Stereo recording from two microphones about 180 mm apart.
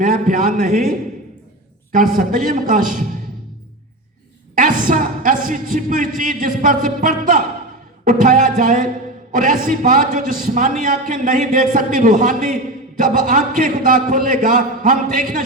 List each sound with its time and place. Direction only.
0.0 s a man's voice: 50° right (ahead or behind)
4.9 s a man's voice: 50° right (ahead or behind)